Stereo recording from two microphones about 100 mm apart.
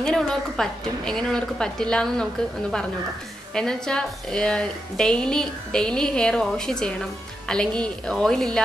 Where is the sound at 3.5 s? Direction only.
5° left (ahead or behind).